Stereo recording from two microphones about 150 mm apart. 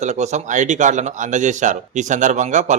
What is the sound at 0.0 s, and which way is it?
Speech, 50° right (ahead or behind).